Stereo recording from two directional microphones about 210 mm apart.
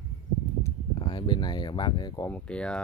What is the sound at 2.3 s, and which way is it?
Speech, 5° left (ahead or behind).